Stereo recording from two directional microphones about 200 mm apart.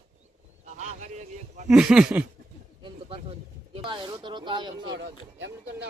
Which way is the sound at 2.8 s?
25° right (ahead or behind).